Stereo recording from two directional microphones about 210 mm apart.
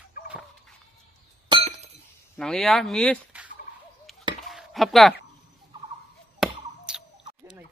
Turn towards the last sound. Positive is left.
turn(degrees=0)  # may be behind; listen again after turning